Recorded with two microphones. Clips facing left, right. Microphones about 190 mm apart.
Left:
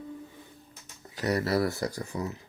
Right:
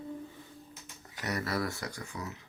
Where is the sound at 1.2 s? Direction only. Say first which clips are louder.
Left 7 dB; 30° left (ahead or behind).